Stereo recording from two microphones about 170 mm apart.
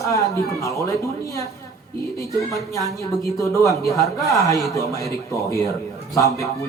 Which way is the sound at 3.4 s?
20° left (ahead or behind).